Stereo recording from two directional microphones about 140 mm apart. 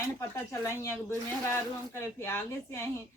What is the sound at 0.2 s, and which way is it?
Speech, 20° left (ahead or behind).